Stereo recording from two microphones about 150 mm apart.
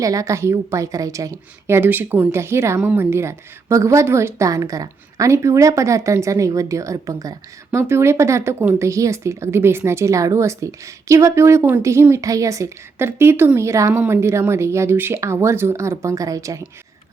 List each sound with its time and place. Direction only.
0.0 s a woman's voice: 20° right (ahead or behind)